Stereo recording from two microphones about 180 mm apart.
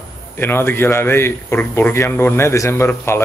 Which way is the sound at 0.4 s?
10° left (ahead or behind).